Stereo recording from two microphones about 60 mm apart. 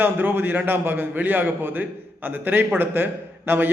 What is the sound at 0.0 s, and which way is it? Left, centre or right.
A man's voice, right.